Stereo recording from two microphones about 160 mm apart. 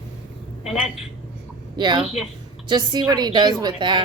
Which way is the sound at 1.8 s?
30° right (ahead or behind).